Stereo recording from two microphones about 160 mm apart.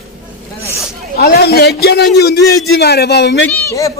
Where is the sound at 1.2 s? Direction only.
75° left (ahead or behind).